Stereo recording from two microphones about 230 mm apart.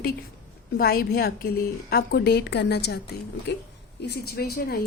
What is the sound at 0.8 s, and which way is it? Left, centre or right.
A woman's voice, left.